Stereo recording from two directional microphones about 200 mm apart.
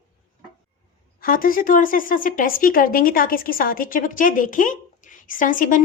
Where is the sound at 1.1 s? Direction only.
45° left (ahead or behind).